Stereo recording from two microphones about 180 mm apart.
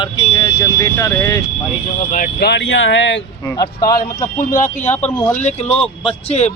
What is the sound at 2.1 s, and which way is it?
Speech, 45° left (ahead or behind).